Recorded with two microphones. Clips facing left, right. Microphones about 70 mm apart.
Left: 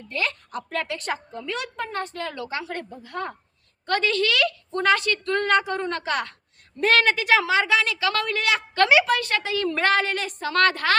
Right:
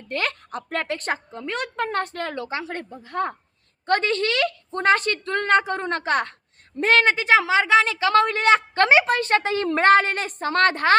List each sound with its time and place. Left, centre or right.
0.1 s a woman's voice: right
2.3 s a woman's voice: right